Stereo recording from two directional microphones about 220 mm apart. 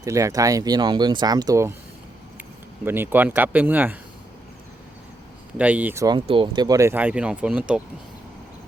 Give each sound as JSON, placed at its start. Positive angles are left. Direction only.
{"t": 0.0, "sound": "speech", "side_deg": -15}
{"t": 5.5, "sound": "speech", "side_deg": -5}